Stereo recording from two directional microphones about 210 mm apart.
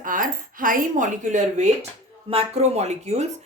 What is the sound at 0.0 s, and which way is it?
A woman's voice, 40° right (ahead or behind).